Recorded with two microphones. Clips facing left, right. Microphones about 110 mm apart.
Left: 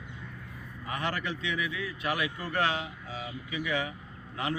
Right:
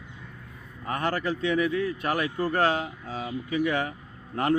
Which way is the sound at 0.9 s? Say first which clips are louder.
Right 6 dB; 45° right (ahead or behind).